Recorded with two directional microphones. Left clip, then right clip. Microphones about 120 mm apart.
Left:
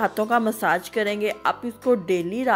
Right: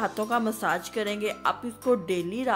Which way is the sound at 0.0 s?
45° left (ahead or behind).